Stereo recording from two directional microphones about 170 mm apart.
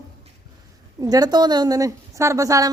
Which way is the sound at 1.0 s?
25° right (ahead or behind).